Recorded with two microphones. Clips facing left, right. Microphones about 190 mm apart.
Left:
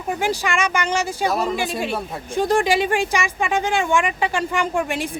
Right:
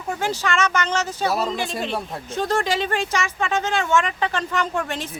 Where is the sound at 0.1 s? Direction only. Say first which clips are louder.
Left 2 dB; 15° left (ahead or behind).